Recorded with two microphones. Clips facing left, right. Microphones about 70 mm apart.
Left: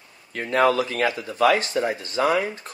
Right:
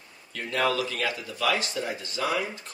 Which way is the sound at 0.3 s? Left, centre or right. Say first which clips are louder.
Left 7 dB; left.